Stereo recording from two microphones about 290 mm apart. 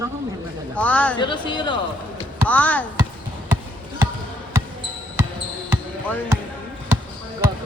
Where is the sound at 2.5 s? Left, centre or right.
Centre.